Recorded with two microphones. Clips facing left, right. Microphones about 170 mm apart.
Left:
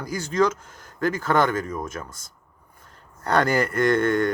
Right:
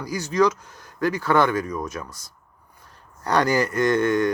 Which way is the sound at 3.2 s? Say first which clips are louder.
Even; 55° left (ahead or behind).